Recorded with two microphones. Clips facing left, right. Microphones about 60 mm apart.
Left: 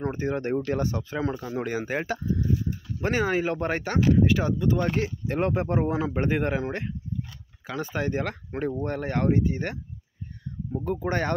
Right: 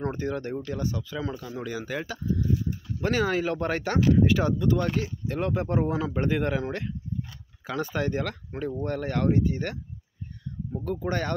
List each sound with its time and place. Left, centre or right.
0.0 s speech: centre
0.3 s speech: left
3.0 s speech: centre
3.8 s speech: centre
4.9 s speech: left
7.6 s speech: centre
8.5 s speech: left
8.8 s speech: left